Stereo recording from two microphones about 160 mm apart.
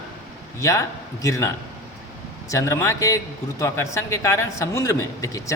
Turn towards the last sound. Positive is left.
turn(degrees=20)  # may be behind; listen again after turning